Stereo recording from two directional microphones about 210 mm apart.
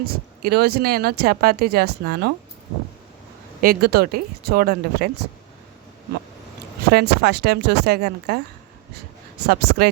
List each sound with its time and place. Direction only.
0.0 s speech: 50° right (ahead or behind)
3.6 s speech: 45° right (ahead or behind)
6.9 s speech: 50° right (ahead or behind)
9.5 s speech: 50° right (ahead or behind)